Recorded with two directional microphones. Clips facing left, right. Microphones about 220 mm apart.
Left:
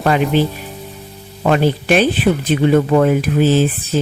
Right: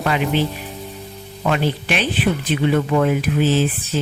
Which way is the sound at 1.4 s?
45° left (ahead or behind).